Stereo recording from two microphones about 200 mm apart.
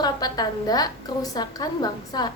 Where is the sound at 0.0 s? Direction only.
20° left (ahead or behind).